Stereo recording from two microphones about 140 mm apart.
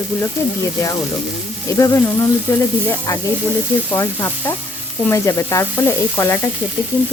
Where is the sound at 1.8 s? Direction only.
20° left (ahead or behind).